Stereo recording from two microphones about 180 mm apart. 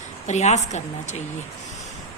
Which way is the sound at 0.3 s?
40° left (ahead or behind).